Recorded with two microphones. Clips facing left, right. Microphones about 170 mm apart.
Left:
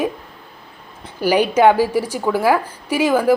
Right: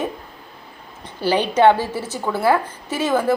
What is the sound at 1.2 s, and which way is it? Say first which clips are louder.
A woman's voice: left 2 dB; 10° left (ahead or behind).